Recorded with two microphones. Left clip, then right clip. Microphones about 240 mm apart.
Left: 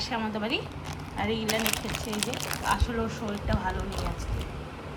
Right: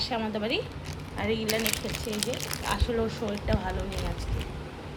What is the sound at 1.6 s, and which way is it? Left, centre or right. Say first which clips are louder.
Speech: left 1 dB; centre.